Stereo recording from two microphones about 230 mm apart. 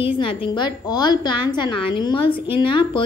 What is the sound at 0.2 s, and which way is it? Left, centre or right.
A woman's voice, left.